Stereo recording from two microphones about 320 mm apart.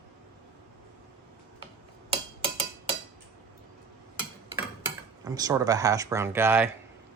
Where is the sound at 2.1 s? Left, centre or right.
Centre.